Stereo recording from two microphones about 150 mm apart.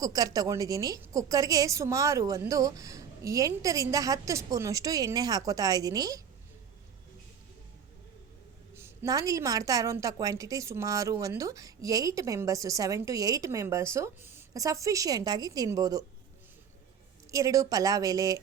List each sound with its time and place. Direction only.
0.0 s a woman's voice: 25° right (ahead or behind)
8.7 s a woman's voice: 20° right (ahead or behind)
17.3 s a woman's voice: 20° right (ahead or behind)